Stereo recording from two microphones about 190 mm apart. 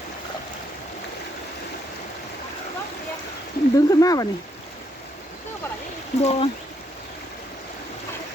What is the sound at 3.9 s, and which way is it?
Speech, 20° left (ahead or behind).